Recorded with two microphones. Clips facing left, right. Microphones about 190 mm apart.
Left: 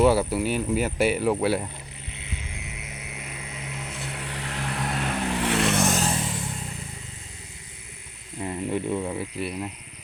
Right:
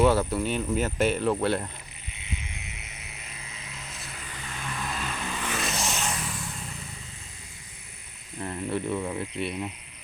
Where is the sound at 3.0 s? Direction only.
90° left.